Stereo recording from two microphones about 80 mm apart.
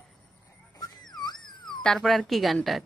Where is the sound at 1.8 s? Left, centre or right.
Centre.